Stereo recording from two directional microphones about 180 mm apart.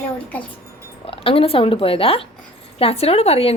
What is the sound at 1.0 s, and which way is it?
A woman's voice, 30° left (ahead or behind).